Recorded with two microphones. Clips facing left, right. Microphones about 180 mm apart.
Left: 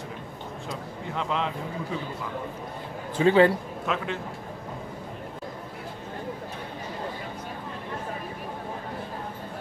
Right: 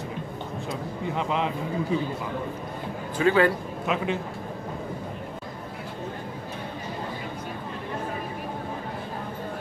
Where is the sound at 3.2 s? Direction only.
25° left (ahead or behind).